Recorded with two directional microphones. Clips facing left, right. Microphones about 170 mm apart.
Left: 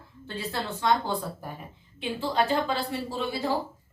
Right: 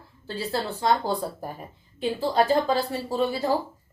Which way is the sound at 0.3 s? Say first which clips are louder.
Right 4 dB; 35° right (ahead or behind).